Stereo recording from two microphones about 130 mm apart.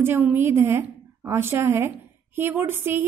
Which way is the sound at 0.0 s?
15° right (ahead or behind).